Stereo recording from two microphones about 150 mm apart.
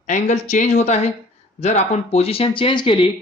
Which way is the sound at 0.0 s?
55° left (ahead or behind).